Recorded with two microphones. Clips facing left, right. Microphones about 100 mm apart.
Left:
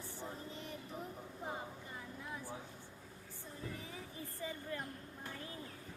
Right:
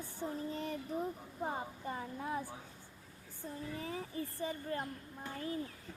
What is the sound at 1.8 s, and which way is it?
Speech, 50° right (ahead or behind).